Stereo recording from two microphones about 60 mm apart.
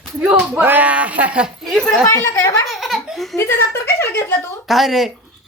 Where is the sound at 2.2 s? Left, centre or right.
Left.